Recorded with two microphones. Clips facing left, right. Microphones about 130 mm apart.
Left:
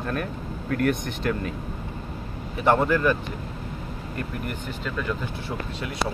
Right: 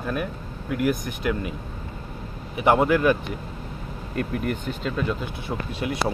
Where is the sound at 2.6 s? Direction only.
10° right (ahead or behind).